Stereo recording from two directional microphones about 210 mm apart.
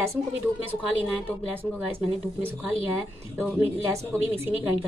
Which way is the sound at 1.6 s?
10° right (ahead or behind).